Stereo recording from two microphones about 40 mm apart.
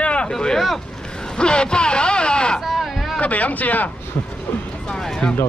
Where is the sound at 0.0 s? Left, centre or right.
Left.